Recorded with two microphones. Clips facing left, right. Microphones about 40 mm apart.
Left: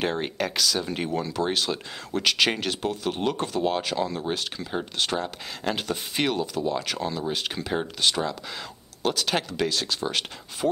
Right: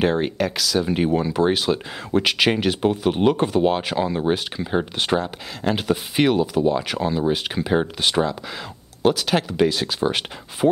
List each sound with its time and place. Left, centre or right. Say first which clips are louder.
0.0 s speech: right 6 dB; centre
0.8 s speech: right 8 dB; centre
5.2 s speech: right 4 dB; centre
9.0 s speech: right 6 dB; centre